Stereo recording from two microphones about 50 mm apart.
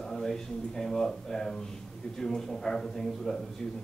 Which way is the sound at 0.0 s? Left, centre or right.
Centre.